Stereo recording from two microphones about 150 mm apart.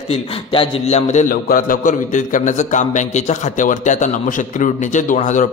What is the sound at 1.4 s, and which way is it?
A man's voice, 70° left (ahead or behind).